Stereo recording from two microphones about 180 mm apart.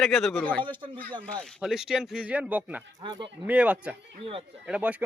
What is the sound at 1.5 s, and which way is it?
Speech, 5° right (ahead or behind).